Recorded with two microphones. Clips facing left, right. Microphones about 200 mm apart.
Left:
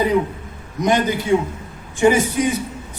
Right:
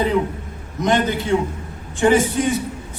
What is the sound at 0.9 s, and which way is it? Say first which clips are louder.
Speech: left 1 dB; 15° left (ahead or behind).